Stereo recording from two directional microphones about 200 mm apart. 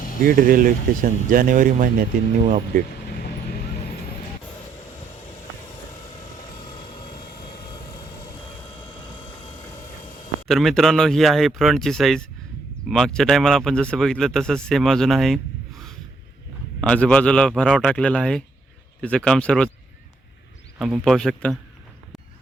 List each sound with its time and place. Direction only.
0.2 s speech: 45° right (ahead or behind)
10.5 s speech: centre (ahead or behind)
20.7 s speech: centre (ahead or behind)